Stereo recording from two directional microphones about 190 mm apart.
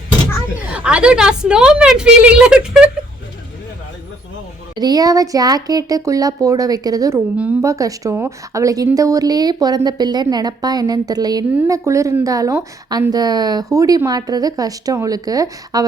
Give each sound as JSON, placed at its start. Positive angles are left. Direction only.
{"t": 0.8, "sound": "a woman's voice", "side_deg": -5}
{"t": 4.8, "sound": "a woman's voice", "side_deg": -20}